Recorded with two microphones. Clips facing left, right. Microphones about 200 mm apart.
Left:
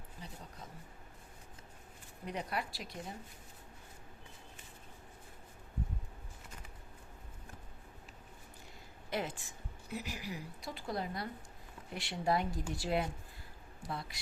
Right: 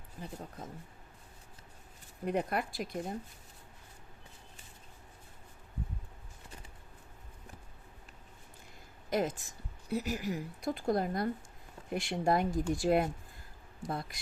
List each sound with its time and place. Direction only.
0.2 s a sound: 50° right (ahead or behind)
2.2 s speech: 50° right (ahead or behind)
9.0 s speech: 45° right (ahead or behind)